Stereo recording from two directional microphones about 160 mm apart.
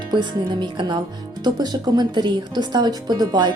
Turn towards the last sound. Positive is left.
turn(degrees=-30)  # may be behind; listen again after turning